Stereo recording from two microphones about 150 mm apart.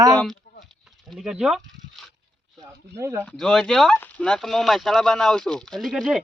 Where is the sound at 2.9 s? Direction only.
20° right (ahead or behind).